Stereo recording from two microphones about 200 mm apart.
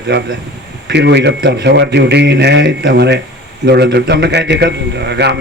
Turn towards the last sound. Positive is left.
turn(degrees=-55)  # may be behind; listen again after turning